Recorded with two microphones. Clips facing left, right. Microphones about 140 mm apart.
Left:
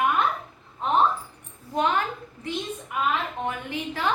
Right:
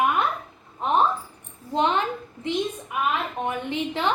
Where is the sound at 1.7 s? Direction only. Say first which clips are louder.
Right 2 dB; 25° right (ahead or behind).